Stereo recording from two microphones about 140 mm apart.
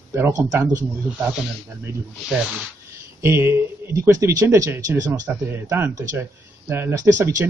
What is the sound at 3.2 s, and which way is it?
Speech, 15° right (ahead or behind).